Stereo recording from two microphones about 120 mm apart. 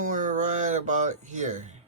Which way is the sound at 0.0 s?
90° right.